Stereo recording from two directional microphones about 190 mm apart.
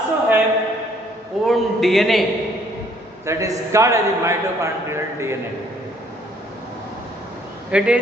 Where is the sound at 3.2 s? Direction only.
15° right (ahead or behind).